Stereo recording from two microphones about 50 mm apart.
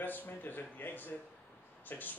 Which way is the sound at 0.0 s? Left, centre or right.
Left.